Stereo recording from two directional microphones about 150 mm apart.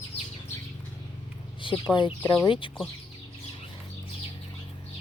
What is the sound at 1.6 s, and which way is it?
Speech, 35° left (ahead or behind).